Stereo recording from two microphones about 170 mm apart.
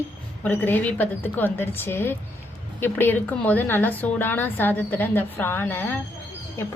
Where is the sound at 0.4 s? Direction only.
10° left (ahead or behind).